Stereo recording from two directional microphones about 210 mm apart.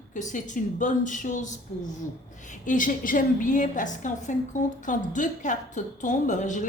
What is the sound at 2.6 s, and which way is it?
A woman's voice, 40° left (ahead or behind).